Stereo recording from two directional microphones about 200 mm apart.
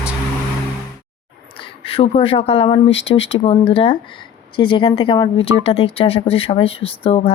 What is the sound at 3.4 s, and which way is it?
Speech, 25° left (ahead or behind).